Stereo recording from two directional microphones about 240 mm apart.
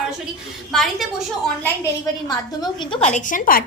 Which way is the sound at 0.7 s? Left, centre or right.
Centre.